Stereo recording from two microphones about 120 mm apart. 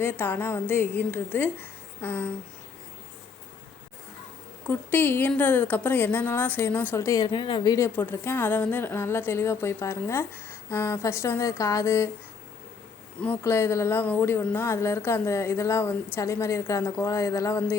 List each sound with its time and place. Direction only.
0.0 s a woman's voice: 15° left (ahead or behind)
4.7 s a woman's voice: 15° left (ahead or behind)
7.3 s speech: 40° left (ahead or behind)
7.9 s speech: 20° left (ahead or behind)
13.2 s speech: 20° left (ahead or behind)